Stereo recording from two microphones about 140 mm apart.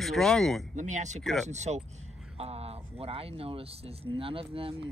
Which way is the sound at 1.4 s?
55° right (ahead or behind).